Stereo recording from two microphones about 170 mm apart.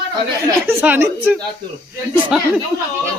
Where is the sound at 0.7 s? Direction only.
10° right (ahead or behind).